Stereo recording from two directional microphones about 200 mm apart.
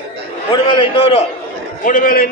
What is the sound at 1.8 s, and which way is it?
Speech, 40° left (ahead or behind).